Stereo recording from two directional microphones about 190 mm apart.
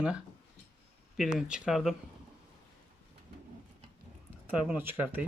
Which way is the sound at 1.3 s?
5° right (ahead or behind).